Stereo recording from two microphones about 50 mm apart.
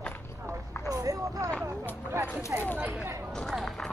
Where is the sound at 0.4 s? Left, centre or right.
Right.